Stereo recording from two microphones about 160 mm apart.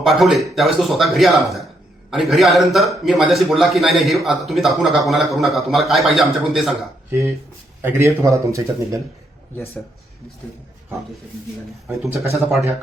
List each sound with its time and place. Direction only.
0.0 s a man's voice: centre (ahead or behind)
7.1 s speech: 15° right (ahead or behind)
12.4 s a man's voice: centre (ahead or behind)